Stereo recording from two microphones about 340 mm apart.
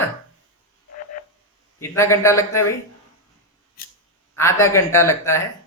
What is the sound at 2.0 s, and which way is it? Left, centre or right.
Speech, centre.